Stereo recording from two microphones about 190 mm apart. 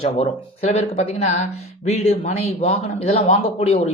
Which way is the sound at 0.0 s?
35° left (ahead or behind).